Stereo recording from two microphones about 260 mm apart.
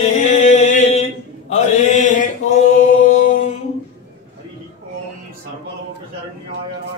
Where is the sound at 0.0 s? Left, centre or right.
Left.